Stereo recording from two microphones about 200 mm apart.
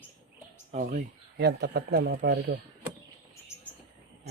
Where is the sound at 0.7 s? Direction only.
40° right (ahead or behind).